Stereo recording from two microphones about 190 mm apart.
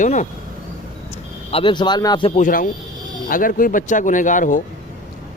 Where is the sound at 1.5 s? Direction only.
25° left (ahead or behind).